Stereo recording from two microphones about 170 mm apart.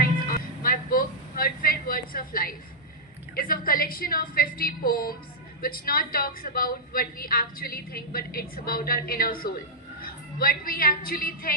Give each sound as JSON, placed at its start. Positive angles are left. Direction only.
{"t": 0.3, "sound": "music", "side_deg": 60}
{"t": 3.3, "sound": "a woman's voice", "side_deg": 60}